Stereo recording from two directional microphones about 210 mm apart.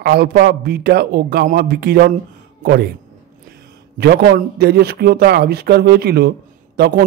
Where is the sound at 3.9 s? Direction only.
50° right (ahead or behind).